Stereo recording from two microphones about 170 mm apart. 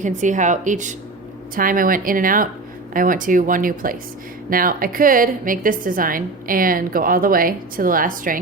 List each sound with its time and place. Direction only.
0.0 s a woman's voice: 45° right (ahead or behind)